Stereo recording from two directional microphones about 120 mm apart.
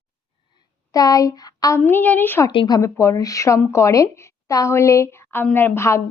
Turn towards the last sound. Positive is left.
turn(degrees=20)  # may be behind; listen again after turning